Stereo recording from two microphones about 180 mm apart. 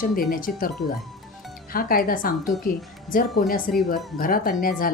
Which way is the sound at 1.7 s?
55° left (ahead or behind).